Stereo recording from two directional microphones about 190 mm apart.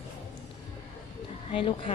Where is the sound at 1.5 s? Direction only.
25° left (ahead or behind).